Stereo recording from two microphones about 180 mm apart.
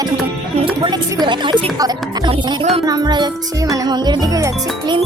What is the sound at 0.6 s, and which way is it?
Speech, 25° right (ahead or behind).